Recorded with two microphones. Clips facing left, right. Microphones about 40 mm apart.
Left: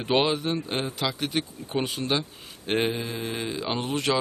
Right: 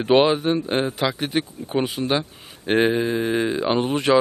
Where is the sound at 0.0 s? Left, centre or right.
Centre.